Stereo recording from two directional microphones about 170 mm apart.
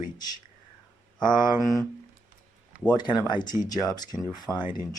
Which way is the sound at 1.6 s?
Centre (ahead or behind).